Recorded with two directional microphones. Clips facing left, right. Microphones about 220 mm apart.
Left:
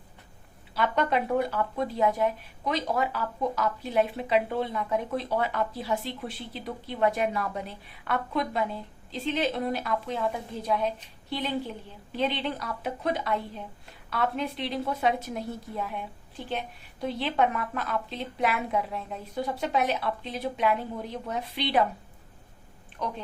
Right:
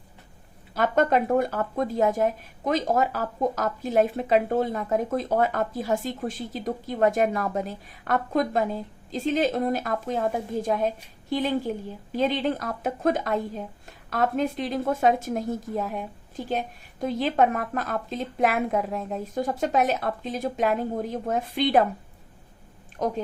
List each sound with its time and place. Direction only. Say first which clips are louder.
0.7 s speech: right 5 dB; 45° right (ahead or behind)
23.0 s a woman's voice: right 7 dB; 45° right (ahead or behind)